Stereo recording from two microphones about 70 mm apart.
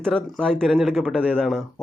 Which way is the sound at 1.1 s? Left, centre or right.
Centre.